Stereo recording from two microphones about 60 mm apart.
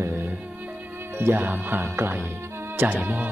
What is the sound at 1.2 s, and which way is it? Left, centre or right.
Speech, right.